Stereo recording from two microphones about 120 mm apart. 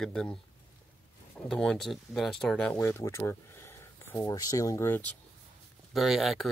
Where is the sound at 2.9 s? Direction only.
20° left (ahead or behind).